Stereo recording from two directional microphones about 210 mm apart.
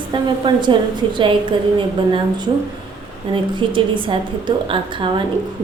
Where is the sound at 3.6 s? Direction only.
25° right (ahead or behind).